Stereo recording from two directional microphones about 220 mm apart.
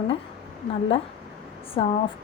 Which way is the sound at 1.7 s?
25° left (ahead or behind).